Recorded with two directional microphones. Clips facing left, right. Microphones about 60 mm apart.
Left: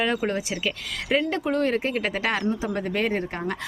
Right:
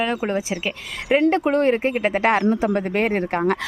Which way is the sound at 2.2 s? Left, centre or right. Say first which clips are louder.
Right 7 dB; right.